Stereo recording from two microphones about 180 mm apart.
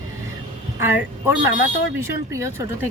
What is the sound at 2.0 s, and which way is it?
Speech, 15° right (ahead or behind).